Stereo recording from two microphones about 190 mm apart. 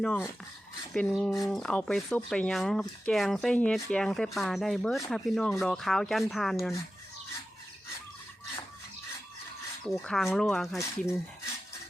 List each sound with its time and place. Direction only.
0.0 s speech: 5° left (ahead or behind)
9.8 s speech: 5° left (ahead or behind)